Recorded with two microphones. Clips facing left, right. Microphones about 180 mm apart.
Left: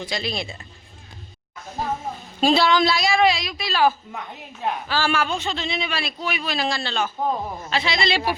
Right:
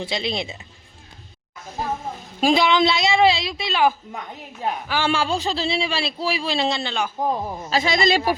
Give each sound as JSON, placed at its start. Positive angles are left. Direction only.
{"t": 0.0, "sound": "a man's voice", "side_deg": -25}
{"t": 2.4, "sound": "a man's voice", "side_deg": -15}
{"t": 7.7, "sound": "speech", "side_deg": -45}